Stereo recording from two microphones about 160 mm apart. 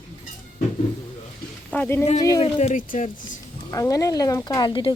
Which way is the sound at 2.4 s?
50° left (ahead or behind).